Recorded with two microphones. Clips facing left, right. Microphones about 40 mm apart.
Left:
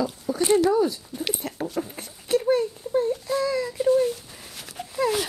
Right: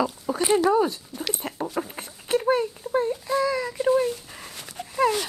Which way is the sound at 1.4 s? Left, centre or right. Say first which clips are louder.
Even; right.